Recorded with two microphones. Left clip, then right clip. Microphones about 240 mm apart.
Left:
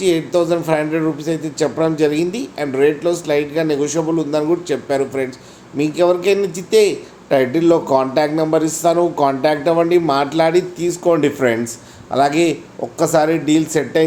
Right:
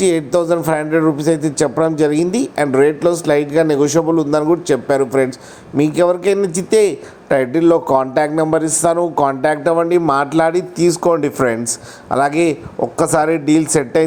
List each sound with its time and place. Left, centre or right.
0.0 s speech: right